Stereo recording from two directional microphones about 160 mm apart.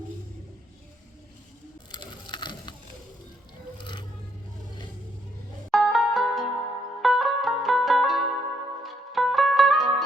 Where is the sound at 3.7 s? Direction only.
30° left (ahead or behind).